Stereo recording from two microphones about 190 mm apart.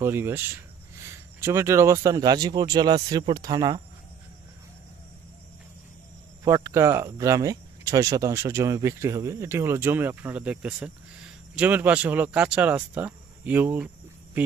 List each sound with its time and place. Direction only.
0.0 s speech: 10° right (ahead or behind)
6.4 s speech: 15° right (ahead or behind)